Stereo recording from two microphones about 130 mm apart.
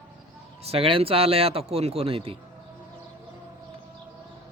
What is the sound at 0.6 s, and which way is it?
Speech, 45° right (ahead or behind).